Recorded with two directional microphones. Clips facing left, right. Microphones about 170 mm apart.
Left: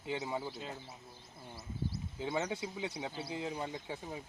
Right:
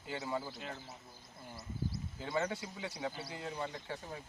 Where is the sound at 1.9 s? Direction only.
25° left (ahead or behind).